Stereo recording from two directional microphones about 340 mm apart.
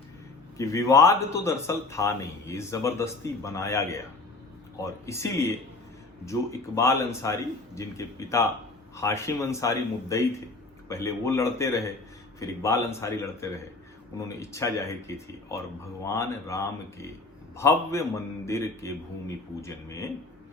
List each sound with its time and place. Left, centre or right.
0.5 s a man's voice: centre